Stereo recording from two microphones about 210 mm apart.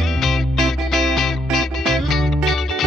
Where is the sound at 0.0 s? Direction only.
Centre (ahead or behind).